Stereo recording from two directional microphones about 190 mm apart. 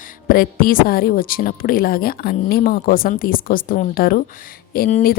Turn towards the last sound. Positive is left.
turn(degrees=50)  # may be behind; listen again after turning